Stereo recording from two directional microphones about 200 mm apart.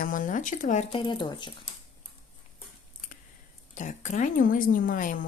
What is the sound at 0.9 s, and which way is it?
Speech, 25° left (ahead or behind).